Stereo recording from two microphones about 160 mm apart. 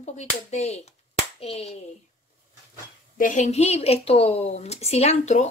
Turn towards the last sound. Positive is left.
turn(degrees=45)  # may be behind; listen again after turning